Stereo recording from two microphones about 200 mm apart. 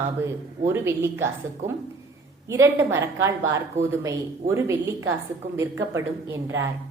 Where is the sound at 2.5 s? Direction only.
15° right (ahead or behind).